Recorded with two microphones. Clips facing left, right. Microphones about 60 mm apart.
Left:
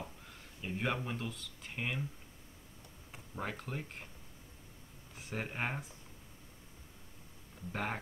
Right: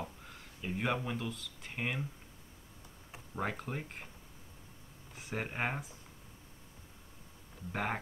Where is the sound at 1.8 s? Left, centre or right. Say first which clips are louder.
Right 1 dB; centre.